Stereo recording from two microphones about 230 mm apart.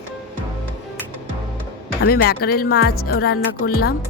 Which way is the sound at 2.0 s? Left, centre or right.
Left.